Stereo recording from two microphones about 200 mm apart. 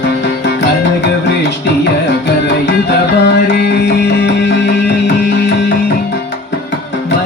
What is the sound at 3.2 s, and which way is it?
Music, 60° left (ahead or behind).